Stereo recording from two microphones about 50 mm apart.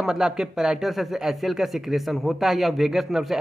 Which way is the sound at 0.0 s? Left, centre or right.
Centre.